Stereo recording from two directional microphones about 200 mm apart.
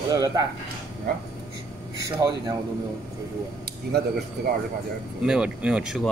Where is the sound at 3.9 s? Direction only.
55° right (ahead or behind).